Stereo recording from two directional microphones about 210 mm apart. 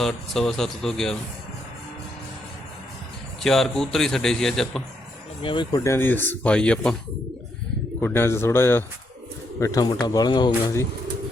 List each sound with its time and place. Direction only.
0.0 s a man's voice: centre (ahead or behind)
3.4 s a man's voice: centre (ahead or behind)
5.4 s speech: 25° left (ahead or behind); by 6.9 s 5° left (ahead or behind)
8.0 s speech: 10° left (ahead or behind)